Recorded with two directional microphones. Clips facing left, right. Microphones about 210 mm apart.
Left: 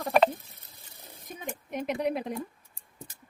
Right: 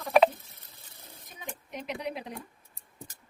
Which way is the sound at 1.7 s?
50° left (ahead or behind).